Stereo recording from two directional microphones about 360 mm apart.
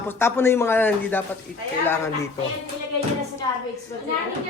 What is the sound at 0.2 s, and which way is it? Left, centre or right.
A man's voice, centre.